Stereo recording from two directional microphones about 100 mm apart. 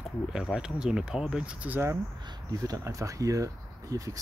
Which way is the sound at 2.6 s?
35° right (ahead or behind).